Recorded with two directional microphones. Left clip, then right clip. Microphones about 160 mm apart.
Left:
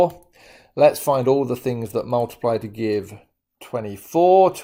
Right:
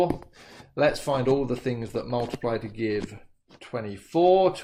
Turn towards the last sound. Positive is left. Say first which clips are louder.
# left 6 dB
turn(degrees=45)  # may be behind; listen again after turning